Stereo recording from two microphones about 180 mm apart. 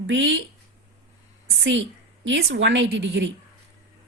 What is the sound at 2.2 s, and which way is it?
A woman's voice, 80° right.